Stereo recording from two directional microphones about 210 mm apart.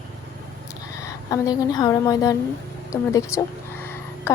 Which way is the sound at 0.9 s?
15° left (ahead or behind).